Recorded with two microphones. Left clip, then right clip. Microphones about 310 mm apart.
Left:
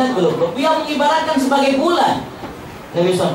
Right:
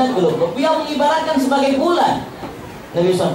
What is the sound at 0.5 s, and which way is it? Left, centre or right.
Speech, centre.